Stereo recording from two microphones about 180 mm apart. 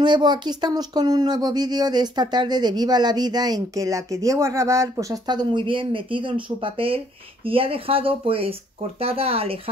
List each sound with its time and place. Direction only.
0.0 s speech: 25° right (ahead or behind)